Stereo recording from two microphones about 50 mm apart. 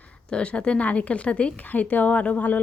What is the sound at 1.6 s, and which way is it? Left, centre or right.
Speech, left.